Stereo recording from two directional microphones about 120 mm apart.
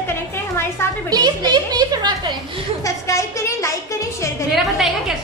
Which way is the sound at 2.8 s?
25° left (ahead or behind).